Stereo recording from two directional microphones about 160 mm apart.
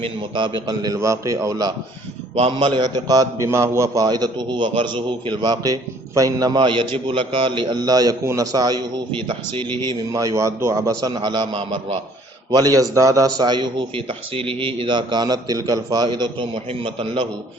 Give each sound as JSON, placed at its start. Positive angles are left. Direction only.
{"t": 0.0, "sound": "a man's voice", "side_deg": -30}